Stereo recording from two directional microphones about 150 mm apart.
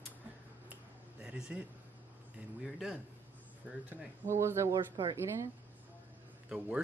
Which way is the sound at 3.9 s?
15° right (ahead or behind).